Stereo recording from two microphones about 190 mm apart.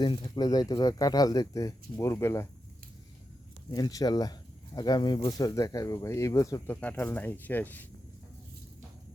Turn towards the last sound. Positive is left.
turn(degrees=10)  # may be behind; listen again after turning